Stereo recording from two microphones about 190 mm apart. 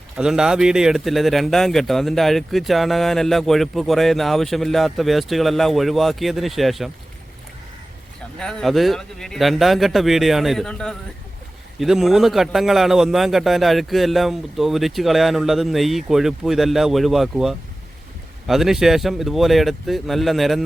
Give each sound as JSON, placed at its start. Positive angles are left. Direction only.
{"t": 0.2, "sound": "speech", "side_deg": -5}
{"t": 8.4, "sound": "speech", "side_deg": 0}